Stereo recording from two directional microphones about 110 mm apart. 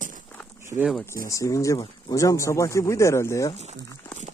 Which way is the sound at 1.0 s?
30° left (ahead or behind).